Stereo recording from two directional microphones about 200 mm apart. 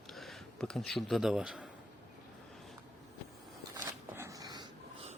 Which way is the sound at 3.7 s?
15° right (ahead or behind).